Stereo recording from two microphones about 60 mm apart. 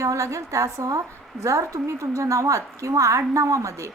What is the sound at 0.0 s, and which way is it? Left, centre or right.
A woman's voice, right.